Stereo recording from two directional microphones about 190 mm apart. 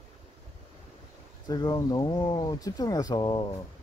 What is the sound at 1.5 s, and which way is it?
Speech, 20° left (ahead or behind).